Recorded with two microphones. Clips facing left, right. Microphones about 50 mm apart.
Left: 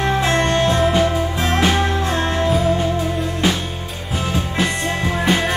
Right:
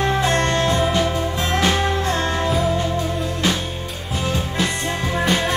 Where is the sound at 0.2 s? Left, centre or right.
Left.